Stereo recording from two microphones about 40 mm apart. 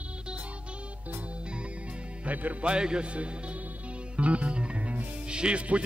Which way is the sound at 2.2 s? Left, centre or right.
Right.